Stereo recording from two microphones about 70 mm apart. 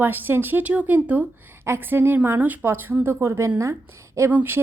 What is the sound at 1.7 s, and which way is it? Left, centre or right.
Speech, right.